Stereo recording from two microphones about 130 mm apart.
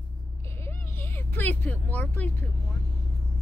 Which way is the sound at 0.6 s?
20° left (ahead or behind).